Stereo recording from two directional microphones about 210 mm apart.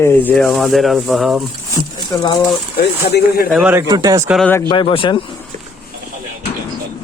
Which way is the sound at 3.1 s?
50° left (ahead or behind).